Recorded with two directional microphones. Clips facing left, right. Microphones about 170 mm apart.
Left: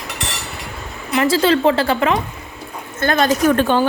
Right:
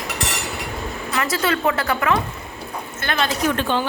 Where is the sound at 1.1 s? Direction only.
25° left (ahead or behind).